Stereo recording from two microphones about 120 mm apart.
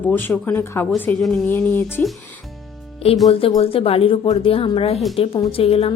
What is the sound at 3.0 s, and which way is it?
Speech, 55° left (ahead or behind).